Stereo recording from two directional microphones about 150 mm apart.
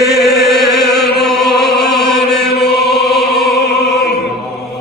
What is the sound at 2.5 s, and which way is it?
Chant, 90° left.